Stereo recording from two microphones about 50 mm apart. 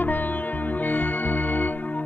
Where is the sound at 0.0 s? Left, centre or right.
Left.